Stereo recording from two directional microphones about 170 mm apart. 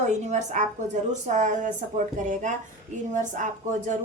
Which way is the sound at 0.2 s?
45° right (ahead or behind).